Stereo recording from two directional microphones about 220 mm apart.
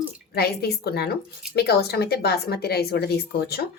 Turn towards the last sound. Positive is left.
turn(degrees=45)  # may be behind; listen again after turning